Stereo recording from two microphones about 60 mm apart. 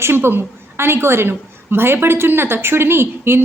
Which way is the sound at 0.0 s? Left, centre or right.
Right.